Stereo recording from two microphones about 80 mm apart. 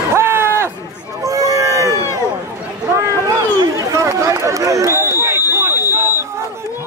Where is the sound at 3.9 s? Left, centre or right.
Right.